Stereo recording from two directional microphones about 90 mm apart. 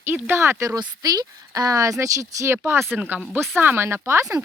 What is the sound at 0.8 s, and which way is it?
Speech, 45° right (ahead or behind).